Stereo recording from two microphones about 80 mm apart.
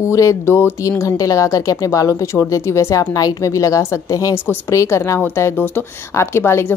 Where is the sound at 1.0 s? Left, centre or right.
Left.